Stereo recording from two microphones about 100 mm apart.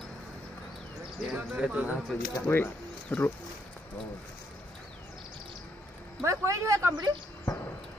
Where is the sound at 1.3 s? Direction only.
15° right (ahead or behind).